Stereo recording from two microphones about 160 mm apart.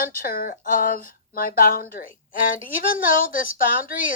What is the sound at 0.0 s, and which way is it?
Speech, 60° left (ahead or behind).